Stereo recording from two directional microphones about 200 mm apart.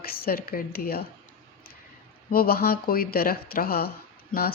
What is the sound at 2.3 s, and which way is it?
Speech, 50° left (ahead or behind).